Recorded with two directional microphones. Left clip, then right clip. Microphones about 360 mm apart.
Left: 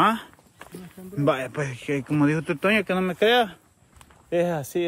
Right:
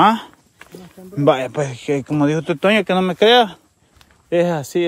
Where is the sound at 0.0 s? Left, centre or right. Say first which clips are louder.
Right 7 dB; centre.